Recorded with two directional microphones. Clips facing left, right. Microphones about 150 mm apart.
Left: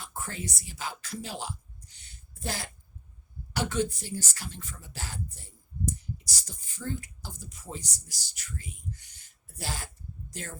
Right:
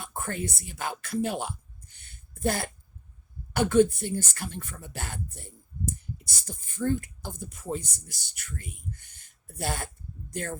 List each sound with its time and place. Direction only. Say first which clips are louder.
0.0 s speech: right 5 dB; 55° right (ahead or behind)